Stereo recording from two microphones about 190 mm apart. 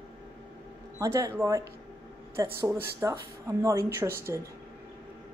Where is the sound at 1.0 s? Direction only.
15° right (ahead or behind).